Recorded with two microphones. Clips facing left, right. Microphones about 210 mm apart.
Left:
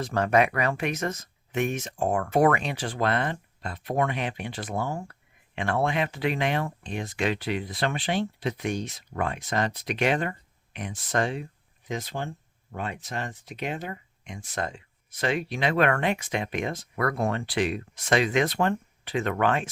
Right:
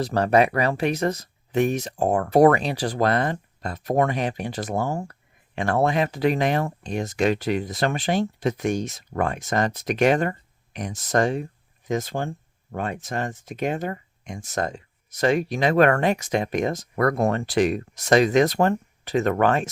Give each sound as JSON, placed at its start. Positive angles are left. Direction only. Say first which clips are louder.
{"t": 0.0, "sound": "speech", "louder": "right 4 dB", "side_deg": -35}